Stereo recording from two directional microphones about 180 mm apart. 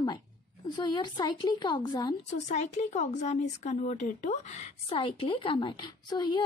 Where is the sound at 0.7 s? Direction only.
25° left (ahead or behind).